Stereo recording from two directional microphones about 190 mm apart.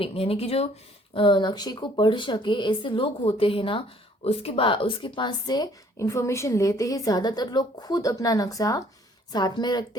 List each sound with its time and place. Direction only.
0.0 s speech: 30° left (ahead or behind)